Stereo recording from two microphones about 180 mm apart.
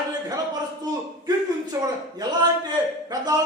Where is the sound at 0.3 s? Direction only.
20° right (ahead or behind).